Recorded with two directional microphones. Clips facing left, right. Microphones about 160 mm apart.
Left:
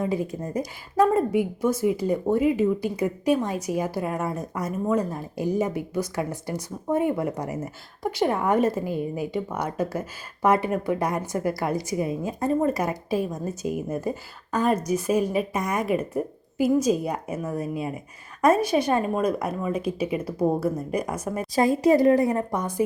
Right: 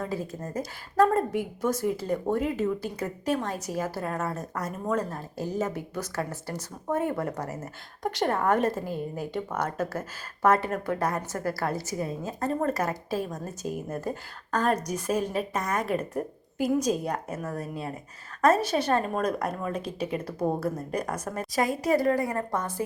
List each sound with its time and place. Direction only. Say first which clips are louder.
0.0 s speech: left 6 dB; 15° left (ahead or behind)
21.5 s a woman's voice: left 6 dB; 25° left (ahead or behind)